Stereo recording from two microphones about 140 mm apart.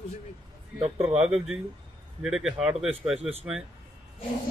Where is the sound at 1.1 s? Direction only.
5° right (ahead or behind).